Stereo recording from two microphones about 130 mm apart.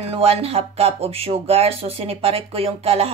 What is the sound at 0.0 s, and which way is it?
Speech, 50° right (ahead or behind).